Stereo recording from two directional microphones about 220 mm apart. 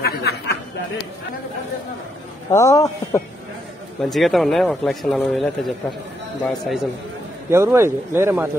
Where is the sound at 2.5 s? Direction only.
15° left (ahead or behind).